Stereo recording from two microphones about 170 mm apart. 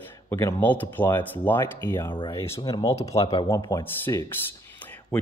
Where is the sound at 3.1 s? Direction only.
30° left (ahead or behind).